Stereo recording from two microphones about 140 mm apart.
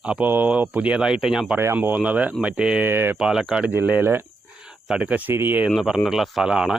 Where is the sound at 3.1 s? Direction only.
5° right (ahead or behind).